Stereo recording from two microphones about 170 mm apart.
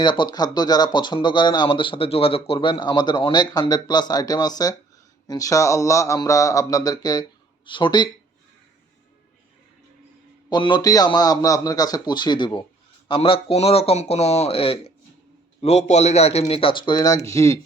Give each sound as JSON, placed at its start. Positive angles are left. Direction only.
{"t": 0.0, "sound": "speech", "side_deg": 25}
{"t": 10.5, "sound": "speech", "side_deg": 25}